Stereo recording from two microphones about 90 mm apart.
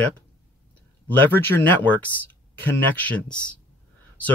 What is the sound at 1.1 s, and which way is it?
Speech, 20° left (ahead or behind).